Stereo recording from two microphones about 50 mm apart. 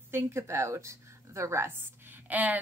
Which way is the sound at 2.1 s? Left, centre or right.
Right.